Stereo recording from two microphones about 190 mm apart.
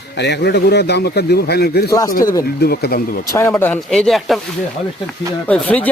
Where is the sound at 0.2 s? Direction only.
60° left (ahead or behind).